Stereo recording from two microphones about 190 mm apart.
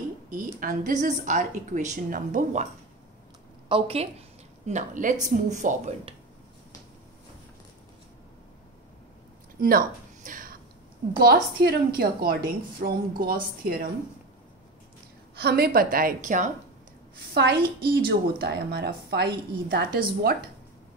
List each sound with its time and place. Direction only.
0.3 s a woman's voice: 45° right (ahead or behind)
3.6 s a woman's voice: 30° right (ahead or behind)
4.6 s speech: 40° right (ahead or behind)
9.6 s a sound: 50° right (ahead or behind)
11.1 s a woman's voice: 55° right (ahead or behind)
15.3 s a woman's voice: 55° right (ahead or behind)
17.3 s speech: 55° right (ahead or behind)